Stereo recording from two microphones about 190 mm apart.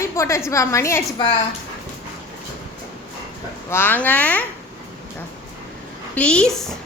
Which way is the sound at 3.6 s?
10° left (ahead or behind).